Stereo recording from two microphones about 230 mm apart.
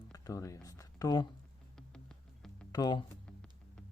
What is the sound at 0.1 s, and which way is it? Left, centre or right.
Speech, centre.